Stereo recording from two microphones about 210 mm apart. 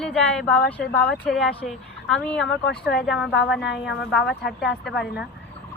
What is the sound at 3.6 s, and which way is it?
Speech, 55° left (ahead or behind).